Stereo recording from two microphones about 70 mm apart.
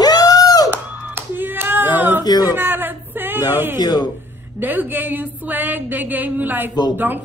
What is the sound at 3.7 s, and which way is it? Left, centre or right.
Speech, left.